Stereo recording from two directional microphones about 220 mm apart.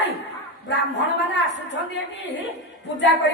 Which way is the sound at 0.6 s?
55° left (ahead or behind).